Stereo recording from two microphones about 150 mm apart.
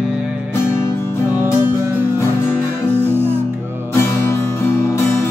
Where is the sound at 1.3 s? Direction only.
10° right (ahead or behind).